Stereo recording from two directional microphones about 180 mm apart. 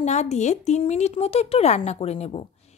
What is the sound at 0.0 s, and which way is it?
A woman's voice, 40° left (ahead or behind).